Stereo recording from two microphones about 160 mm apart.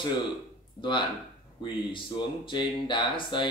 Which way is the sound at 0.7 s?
30° left (ahead or behind).